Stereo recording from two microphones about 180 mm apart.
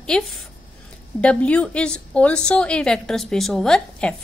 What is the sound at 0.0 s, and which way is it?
A woman's voice, 5° left (ahead or behind).